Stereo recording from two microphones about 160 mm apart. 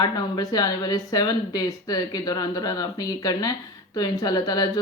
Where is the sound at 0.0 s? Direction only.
25° left (ahead or behind).